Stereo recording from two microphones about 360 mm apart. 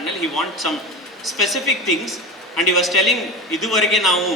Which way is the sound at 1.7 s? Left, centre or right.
Left.